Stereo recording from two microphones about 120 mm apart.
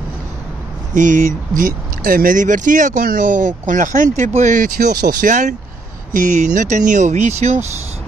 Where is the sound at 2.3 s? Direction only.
90° right; by 7.6 s 75° right (ahead or behind).